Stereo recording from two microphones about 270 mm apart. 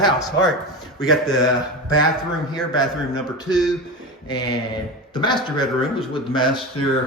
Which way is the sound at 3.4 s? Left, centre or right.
Centre.